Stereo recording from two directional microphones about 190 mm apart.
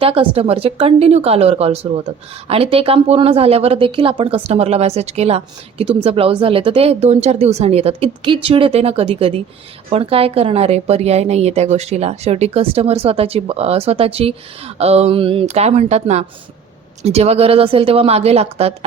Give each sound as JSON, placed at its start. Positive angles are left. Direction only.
{"t": 0.0, "sound": "speech", "side_deg": -30}